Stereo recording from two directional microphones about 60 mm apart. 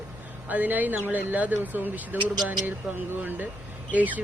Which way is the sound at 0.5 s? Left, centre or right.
Right.